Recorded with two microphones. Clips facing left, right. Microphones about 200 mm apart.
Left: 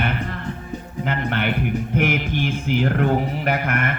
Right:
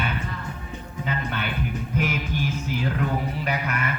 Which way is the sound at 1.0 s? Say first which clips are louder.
Left 6 dB; 65° left (ahead or behind).